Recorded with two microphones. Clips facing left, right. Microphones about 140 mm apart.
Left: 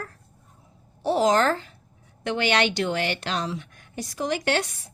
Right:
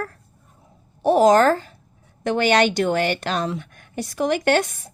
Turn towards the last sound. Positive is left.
turn(degrees=-50)  # may be behind; listen again after turning